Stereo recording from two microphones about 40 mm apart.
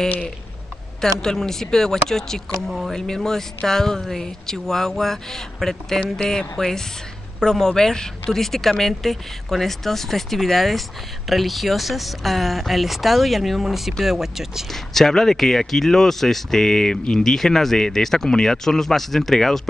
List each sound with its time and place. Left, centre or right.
1.0 s speech: centre
6.1 s speech: centre
14.7 s speech: centre